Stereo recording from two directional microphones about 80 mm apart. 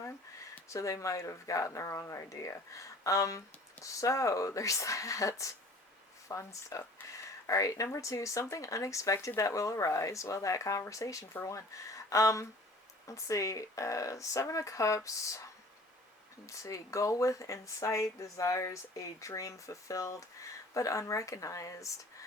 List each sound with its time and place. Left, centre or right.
0.7 s speech: left
16.5 s speech: left